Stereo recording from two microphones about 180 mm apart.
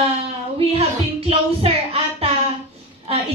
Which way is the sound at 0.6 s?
35° right (ahead or behind).